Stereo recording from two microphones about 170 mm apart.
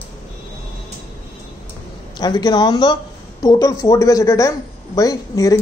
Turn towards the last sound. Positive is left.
turn(degrees=20)  # may be behind; listen again after turning